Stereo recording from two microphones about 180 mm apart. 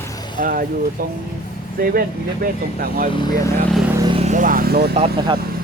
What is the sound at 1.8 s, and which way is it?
Speech, 55° right (ahead or behind).